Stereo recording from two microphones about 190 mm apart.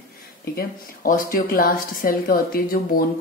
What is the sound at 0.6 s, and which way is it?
Speech, 45° left (ahead or behind).